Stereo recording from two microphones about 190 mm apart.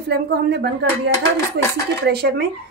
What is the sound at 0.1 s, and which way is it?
Speech, 60° right (ahead or behind).